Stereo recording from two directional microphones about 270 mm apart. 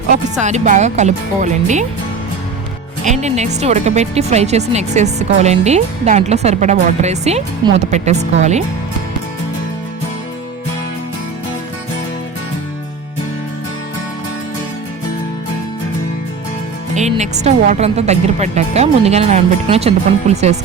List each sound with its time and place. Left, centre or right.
0.3 s speech: right
3.0 s speech: right
16.9 s speech: right